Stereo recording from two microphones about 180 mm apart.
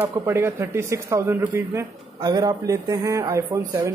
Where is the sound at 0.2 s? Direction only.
15° right (ahead or behind).